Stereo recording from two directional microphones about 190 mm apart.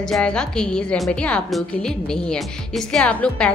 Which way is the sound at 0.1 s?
5° left (ahead or behind).